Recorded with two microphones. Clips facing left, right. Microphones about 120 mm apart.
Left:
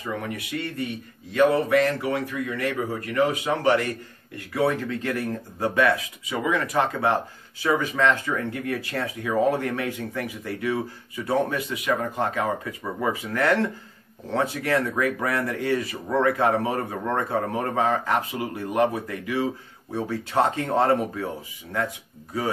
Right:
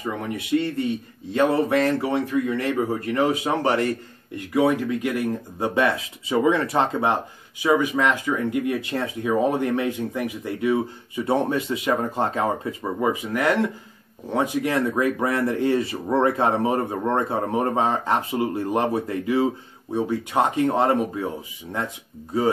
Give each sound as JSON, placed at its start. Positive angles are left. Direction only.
{"t": 0.0, "sound": "speech", "side_deg": -25}
{"t": 4.5, "sound": "speech", "side_deg": -15}